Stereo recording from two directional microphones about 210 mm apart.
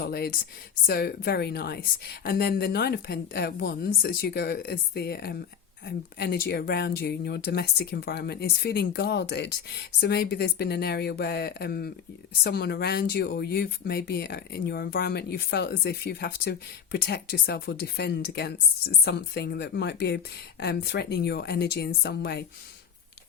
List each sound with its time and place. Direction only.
0.0 s speech: 45° left (ahead or behind)